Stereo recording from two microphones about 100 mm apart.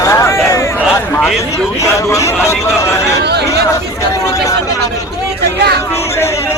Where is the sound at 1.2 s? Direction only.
Centre (ahead or behind).